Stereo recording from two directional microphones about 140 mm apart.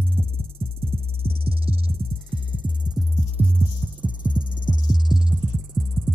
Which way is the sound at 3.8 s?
Centre (ahead or behind).